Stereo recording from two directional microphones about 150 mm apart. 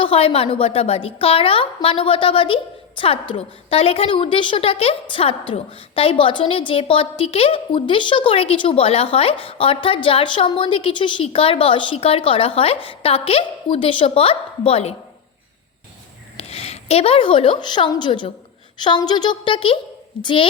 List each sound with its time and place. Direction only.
0.0 s a woman's voice: 35° left (ahead or behind)
16.4 s a woman's voice: 40° left (ahead or behind)